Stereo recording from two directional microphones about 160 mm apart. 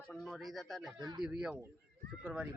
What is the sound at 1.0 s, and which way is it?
Speech, 25° right (ahead or behind).